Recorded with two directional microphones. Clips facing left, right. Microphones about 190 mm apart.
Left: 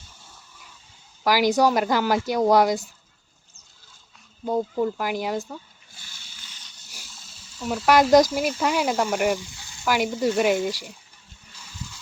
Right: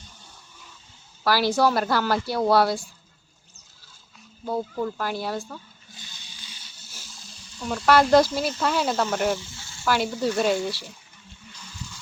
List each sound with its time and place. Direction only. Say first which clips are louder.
1.2 s speech: left 2 dB; 15° left (ahead or behind)
4.4 s speech: left 4 dB; 15° left (ahead or behind)
6.0 s a sound: right 2 dB; 20° right (ahead or behind)
7.1 s speech: right 3 dB; centre (ahead or behind)